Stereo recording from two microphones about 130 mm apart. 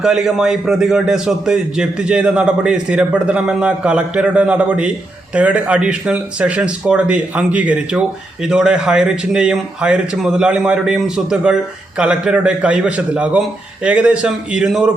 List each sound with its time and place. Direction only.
0.0 s a man's voice: 5° right (ahead or behind)